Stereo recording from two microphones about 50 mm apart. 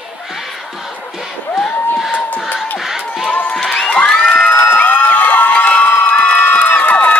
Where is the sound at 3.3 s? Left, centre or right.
Left.